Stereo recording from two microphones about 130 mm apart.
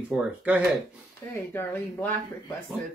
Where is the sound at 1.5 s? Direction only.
15° left (ahead or behind).